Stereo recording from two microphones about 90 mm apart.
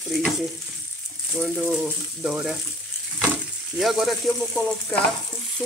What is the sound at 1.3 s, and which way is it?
Speech, 5° right (ahead or behind).